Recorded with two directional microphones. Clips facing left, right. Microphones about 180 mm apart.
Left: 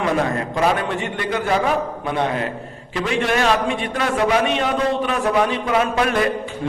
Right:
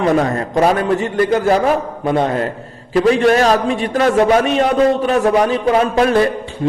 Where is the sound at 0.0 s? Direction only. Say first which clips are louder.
Right 5 dB; 40° right (ahead or behind).